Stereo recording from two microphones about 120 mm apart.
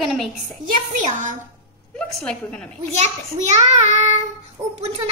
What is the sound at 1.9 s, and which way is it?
Speech, 5° left (ahead or behind).